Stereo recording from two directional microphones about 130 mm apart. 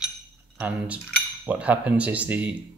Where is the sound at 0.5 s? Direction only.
10° right (ahead or behind).